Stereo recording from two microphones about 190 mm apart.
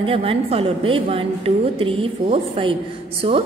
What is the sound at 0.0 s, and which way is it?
A woman's voice, 30° right (ahead or behind).